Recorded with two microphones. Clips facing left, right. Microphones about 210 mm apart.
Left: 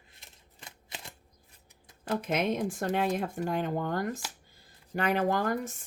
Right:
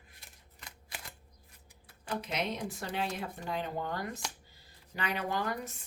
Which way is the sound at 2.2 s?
50° left (ahead or behind).